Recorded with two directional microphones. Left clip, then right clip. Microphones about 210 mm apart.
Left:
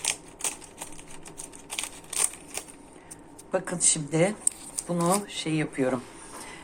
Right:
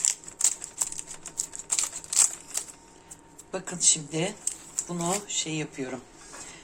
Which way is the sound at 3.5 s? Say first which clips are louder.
Left 6 dB; 5° left (ahead or behind).